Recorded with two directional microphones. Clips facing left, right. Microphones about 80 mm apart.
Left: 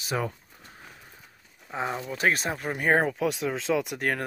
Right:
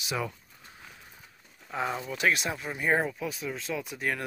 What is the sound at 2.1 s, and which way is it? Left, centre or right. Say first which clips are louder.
Speech: left 3 dB; left.